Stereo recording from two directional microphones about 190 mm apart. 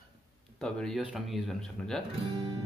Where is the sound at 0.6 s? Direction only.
5° left (ahead or behind).